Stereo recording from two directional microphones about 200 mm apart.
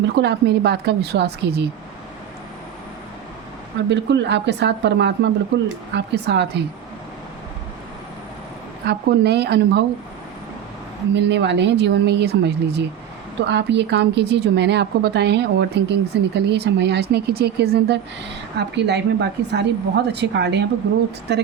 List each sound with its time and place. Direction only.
0.2 s speech: 60° right (ahead or behind)
3.8 s speech: 60° right (ahead or behind)
8.9 s speech: 55° right (ahead or behind)
11.1 s speech: 60° right (ahead or behind)